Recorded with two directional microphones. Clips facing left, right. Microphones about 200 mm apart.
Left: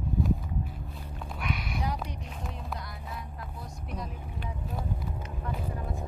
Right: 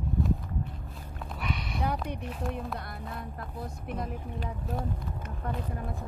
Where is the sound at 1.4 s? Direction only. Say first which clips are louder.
Right 1 dB; centre (ahead or behind).